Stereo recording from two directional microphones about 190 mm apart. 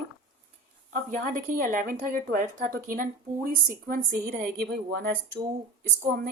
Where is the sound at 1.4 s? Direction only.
45° right (ahead or behind).